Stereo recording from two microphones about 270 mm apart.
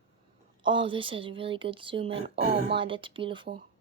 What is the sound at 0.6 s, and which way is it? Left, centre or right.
Speech, centre.